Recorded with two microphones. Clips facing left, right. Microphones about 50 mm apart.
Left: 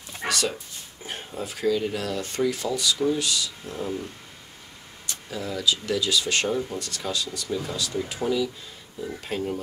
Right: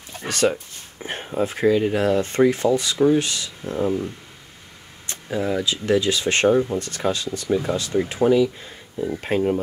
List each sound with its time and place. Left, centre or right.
0.3 s speech: right